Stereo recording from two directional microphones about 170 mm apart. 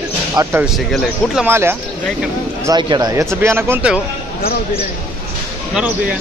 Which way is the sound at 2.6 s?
25° right (ahead or behind).